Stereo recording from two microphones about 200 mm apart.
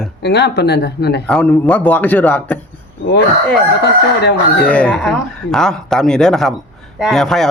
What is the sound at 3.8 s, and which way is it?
Speech, 55° left (ahead or behind).